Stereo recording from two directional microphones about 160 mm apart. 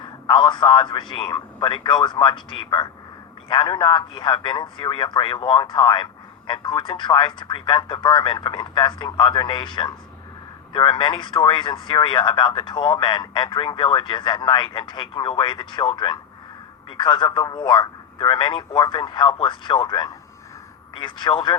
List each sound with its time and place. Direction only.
0.0 s speech: 30° left (ahead or behind)